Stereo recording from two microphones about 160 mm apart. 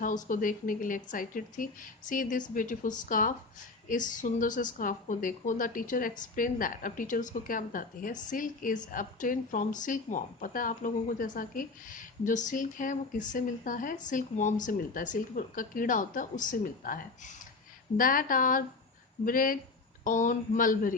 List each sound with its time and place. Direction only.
0.0 s a woman's voice: 55° left (ahead or behind)